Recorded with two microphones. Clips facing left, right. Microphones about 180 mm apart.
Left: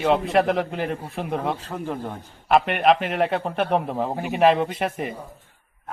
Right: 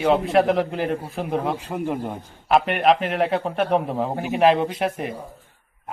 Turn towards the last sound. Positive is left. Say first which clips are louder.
# right 2 dB
turn(degrees=0)  # may be behind; listen again after turning